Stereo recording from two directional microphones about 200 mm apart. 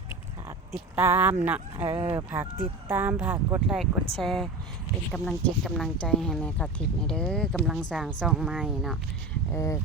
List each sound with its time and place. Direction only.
0.4 s speech: 10° right (ahead or behind)
9.5 s speech: 15° left (ahead or behind)